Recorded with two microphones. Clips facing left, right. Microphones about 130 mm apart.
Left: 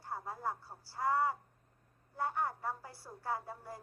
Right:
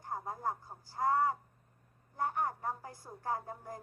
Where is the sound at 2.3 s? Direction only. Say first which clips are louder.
Right 1 dB; 15° right (ahead or behind).